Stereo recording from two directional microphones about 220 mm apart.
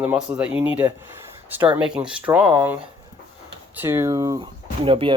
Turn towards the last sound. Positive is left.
turn(degrees=-25)  # may be behind; listen again after turning